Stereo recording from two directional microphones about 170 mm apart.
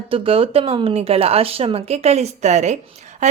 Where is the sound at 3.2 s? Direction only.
45° right (ahead or behind).